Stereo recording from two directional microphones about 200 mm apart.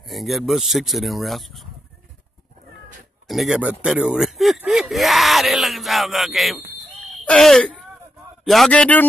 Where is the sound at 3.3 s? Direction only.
Centre (ahead or behind).